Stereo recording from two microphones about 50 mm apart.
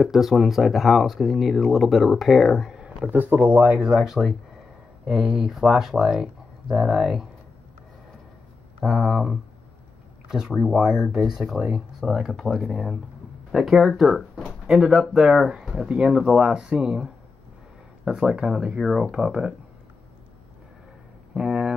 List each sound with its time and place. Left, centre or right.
0.0 s speech: centre
3.1 s speech: right
3.7 s speech: centre
8.8 s speech: centre
10.7 s speech: centre
21.4 s a sound: centre